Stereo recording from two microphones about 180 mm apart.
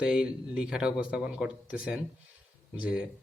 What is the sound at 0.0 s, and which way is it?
A man's voice, 5° right (ahead or behind).